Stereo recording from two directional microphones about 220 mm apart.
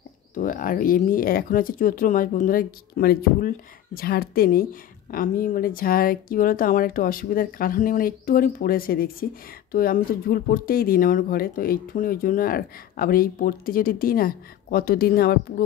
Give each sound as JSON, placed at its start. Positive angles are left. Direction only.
{"t": 0.3, "sound": "speech", "side_deg": 35}